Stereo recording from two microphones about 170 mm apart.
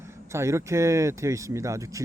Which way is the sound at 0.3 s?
15° right (ahead or behind).